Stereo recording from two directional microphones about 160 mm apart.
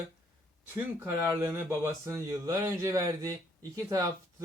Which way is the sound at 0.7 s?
15° right (ahead or behind).